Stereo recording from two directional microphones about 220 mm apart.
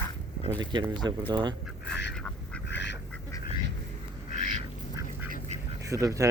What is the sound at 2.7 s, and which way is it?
Duck, 55° left (ahead or behind).